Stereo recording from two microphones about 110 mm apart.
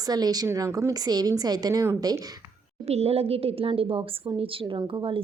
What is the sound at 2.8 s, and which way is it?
A woman's voice, 70° right (ahead or behind).